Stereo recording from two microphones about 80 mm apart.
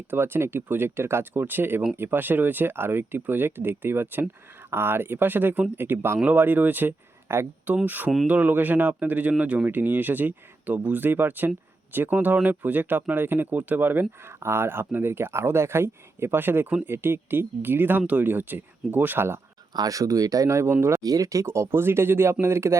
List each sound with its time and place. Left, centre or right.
0.1 s speech: right
19.7 s speech: right